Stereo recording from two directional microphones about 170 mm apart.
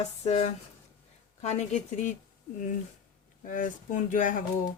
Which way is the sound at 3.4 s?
50° left (ahead or behind).